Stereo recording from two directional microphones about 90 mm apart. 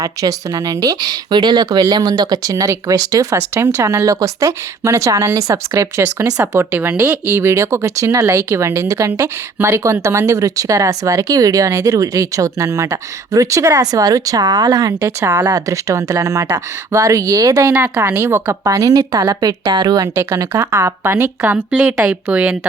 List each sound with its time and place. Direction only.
0.0 s speech: 40° right (ahead or behind)
1.3 s speech: 55° right (ahead or behind); by 6.4 s 35° right (ahead or behind)
6.5 s speech: 25° right (ahead or behind)
7.3 s speech: 30° right (ahead or behind)
17.7 s speech: 20° right (ahead or behind)
18.6 s a woman's voice: 40° right (ahead or behind)
20.1 s speech: 35° right (ahead or behind); by 22.5 s 15° right (ahead or behind)